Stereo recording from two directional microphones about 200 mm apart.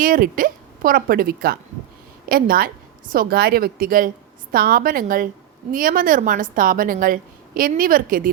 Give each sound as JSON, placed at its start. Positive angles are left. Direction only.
{"t": 0.0, "sound": "a woman's voice", "side_deg": -45}